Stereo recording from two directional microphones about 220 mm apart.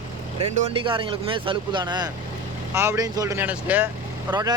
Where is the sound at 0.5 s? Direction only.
25° right (ahead or behind); by 3.8 s 5° right (ahead or behind).